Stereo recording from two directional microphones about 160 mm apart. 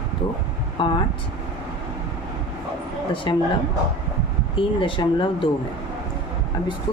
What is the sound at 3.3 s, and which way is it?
Speech, 30° left (ahead or behind).